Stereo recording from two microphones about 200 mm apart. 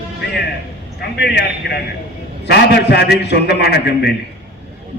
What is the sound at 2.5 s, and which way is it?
A man's voice, 55° left (ahead or behind).